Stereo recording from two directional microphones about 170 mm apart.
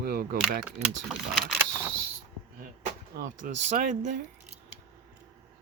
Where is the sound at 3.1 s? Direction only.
50° right (ahead or behind).